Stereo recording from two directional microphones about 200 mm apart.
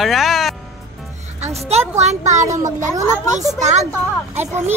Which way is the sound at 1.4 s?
30° right (ahead or behind).